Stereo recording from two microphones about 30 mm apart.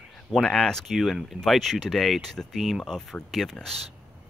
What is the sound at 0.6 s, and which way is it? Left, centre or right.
Speech, centre.